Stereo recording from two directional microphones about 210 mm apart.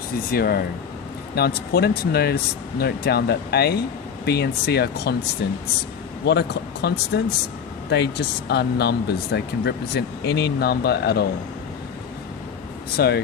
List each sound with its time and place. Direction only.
0.1 s speech: 45° left (ahead or behind)
13.0 s speech: 50° left (ahead or behind)